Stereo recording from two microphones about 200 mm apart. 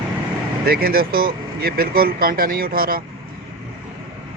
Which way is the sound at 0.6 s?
50° right (ahead or behind).